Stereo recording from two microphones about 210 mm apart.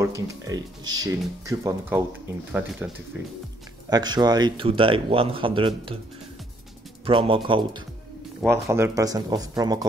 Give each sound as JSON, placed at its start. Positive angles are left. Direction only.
{"t": 0.0, "sound": "speech", "side_deg": -15}
{"t": 3.9, "sound": "speech", "side_deg": -20}
{"t": 7.1, "sound": "speech", "side_deg": -25}
{"t": 8.4, "sound": "speech", "side_deg": -10}